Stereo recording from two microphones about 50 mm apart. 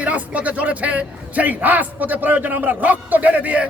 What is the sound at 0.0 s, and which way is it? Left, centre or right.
A man's voice, right.